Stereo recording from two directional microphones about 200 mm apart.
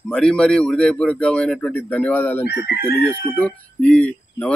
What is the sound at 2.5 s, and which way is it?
Chicken, 55° left (ahead or behind).